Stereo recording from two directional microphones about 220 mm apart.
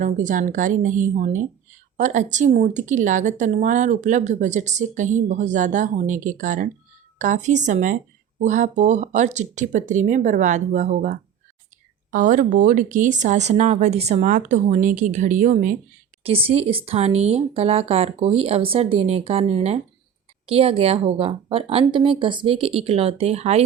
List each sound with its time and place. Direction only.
0.0 s speech: 35° right (ahead or behind)
16.2 s speech: 25° right (ahead or behind)